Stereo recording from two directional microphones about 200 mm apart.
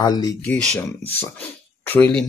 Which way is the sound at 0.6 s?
5° left (ahead or behind).